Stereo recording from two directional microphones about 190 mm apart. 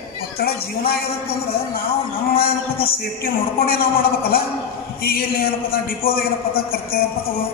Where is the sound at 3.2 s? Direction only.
50° left (ahead or behind).